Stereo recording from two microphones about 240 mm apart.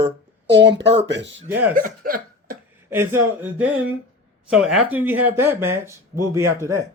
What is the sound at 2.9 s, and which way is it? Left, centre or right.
Speech, centre.